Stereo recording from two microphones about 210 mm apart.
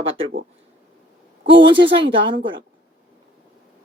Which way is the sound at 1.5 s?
25° right (ahead or behind).